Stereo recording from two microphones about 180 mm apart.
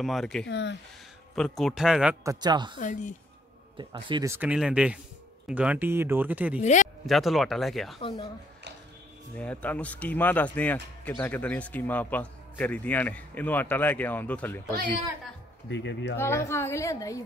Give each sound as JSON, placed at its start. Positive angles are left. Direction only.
{"t": 0.0, "sound": "speech", "side_deg": 0}
{"t": 0.5, "sound": "speech", "side_deg": 80}
{"t": 1.3, "sound": "speech", "side_deg": 0}
{"t": 2.2, "sound": "speech", "side_deg": -25}
{"t": 2.8, "sound": "a woman's voice", "side_deg": 45}
{"t": 3.7, "sound": "speech", "side_deg": -25}
{"t": 6.6, "sound": "speech", "side_deg": 40}
{"t": 7.1, "sound": "speech", "side_deg": 0}
{"t": 8.0, "sound": "speech", "side_deg": 30}
{"t": 9.4, "sound": "speech", "side_deg": 5}
{"t": 15.7, "sound": "speech", "side_deg": 85}
{"t": 16.2, "sound": "speech", "side_deg": 15}